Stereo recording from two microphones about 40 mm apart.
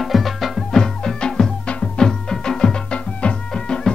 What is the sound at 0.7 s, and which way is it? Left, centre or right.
Music, centre.